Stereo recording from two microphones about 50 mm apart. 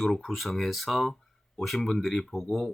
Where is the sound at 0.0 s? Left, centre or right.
Centre.